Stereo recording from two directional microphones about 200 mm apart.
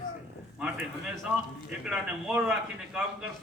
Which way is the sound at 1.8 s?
5° right (ahead or behind).